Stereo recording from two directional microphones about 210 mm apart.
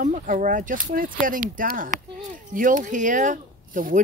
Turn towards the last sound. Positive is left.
turn(degrees=-40)  # may be behind; listen again after turning